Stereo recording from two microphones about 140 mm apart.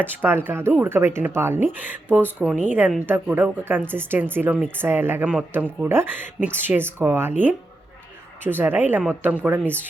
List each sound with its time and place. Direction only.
0.0 s speech: 15° right (ahead or behind)